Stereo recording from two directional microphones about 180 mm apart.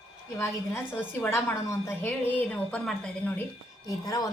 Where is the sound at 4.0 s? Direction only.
20° left (ahead or behind).